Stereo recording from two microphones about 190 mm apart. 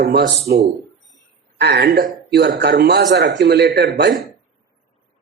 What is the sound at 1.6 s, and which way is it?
A man's voice, 60° right (ahead or behind).